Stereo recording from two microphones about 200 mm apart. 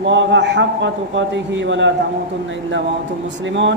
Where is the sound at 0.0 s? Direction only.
65° right (ahead or behind).